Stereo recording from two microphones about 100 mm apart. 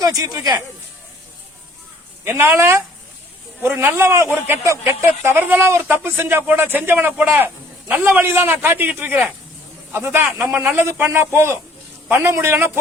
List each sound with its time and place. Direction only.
0.0 s speech: 35° right (ahead or behind)
2.2 s speech: 25° right (ahead or behind)
10.3 s a man's voice: 20° right (ahead or behind)